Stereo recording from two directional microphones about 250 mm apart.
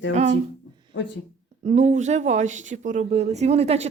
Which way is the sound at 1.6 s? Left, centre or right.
Right.